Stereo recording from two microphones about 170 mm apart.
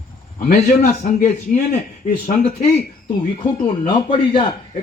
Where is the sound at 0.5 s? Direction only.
45° left (ahead or behind).